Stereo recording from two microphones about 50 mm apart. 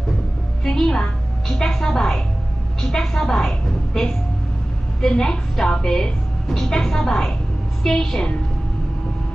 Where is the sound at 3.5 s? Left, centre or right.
Centre.